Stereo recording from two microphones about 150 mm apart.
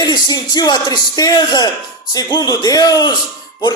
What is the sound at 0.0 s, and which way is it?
A man's voice, 25° left (ahead or behind).